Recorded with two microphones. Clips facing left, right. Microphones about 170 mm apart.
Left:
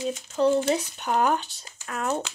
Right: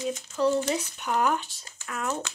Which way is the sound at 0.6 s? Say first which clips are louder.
Left 3 dB; 30° left (ahead or behind).